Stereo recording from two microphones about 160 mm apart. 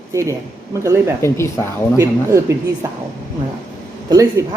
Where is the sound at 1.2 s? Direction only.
15° left (ahead or behind).